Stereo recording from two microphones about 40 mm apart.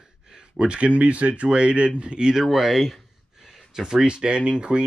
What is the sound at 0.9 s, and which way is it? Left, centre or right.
Speech, right.